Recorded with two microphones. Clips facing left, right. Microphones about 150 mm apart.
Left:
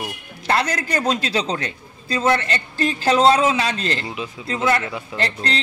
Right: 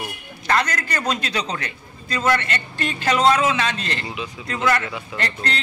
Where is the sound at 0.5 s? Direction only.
30° left (ahead or behind).